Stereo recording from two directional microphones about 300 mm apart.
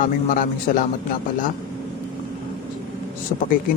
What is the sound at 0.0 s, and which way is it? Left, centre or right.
Speech, left.